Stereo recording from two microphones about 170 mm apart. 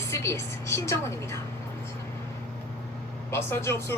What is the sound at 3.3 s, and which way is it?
Speech, 15° left (ahead or behind).